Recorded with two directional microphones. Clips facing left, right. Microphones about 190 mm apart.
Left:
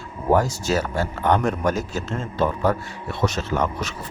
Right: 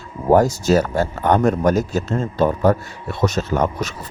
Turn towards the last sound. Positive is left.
turn(degrees=-40)  # may be behind; listen again after turning